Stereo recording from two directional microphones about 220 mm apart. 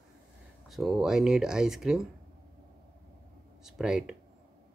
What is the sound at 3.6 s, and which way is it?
Speech, centre (ahead or behind).